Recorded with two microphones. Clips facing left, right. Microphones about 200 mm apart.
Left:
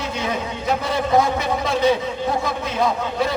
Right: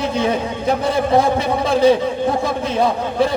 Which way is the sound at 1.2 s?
30° right (ahead or behind).